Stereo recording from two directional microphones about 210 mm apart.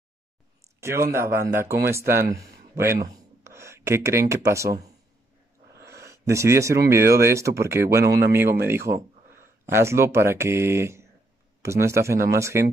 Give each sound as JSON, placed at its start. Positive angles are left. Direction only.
{"t": 0.7, "sound": "speech", "side_deg": -15}
{"t": 5.9, "sound": "a sound", "side_deg": -15}
{"t": 6.9, "sound": "speech", "side_deg": -15}